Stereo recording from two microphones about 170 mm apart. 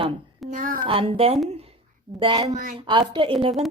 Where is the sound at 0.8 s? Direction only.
35° right (ahead or behind).